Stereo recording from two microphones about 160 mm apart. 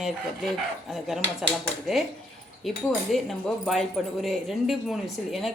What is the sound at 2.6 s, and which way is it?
Speech, centre (ahead or behind).